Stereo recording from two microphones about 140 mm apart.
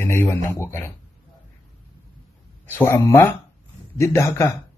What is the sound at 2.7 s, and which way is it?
Speech, 20° left (ahead or behind).